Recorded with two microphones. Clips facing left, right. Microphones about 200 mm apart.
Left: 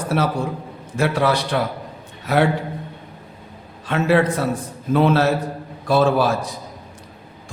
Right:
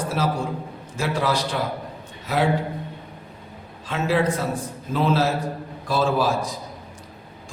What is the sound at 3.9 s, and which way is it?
A man's voice, 60° left (ahead or behind).